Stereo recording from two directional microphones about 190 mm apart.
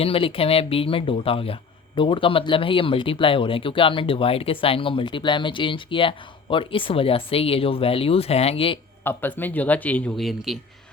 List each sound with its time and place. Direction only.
0.0 s speech: 30° left (ahead or behind)
9.0 s a man's voice: 10° left (ahead or behind)